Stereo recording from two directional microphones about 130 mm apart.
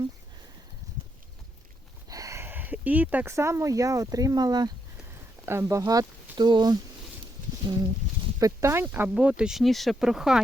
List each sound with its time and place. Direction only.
2.0 s a sound: 25° right (ahead or behind)
3.3 s speech: 20° right (ahead or behind)
5.5 s speech: 20° right (ahead or behind); by 10.4 s 5° right (ahead or behind)